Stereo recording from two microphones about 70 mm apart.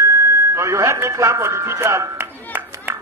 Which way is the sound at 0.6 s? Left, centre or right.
Right.